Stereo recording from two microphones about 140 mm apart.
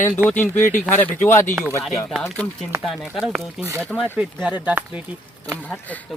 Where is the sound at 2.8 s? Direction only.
Centre (ahead or behind).